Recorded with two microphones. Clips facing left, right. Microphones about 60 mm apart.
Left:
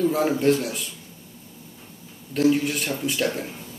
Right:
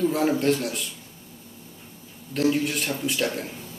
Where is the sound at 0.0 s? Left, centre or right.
Centre.